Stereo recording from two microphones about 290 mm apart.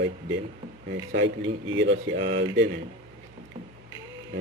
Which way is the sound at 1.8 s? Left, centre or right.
Right.